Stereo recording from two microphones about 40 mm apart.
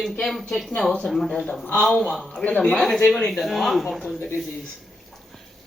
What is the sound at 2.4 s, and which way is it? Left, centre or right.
Speech, left.